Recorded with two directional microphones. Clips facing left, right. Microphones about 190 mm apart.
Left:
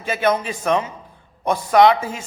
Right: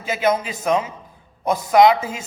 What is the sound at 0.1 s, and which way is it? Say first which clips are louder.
A man's voice: even; 10° right (ahead or behind).